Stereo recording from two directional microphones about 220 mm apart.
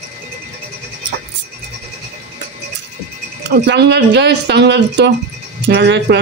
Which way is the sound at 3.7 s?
50° right (ahead or behind).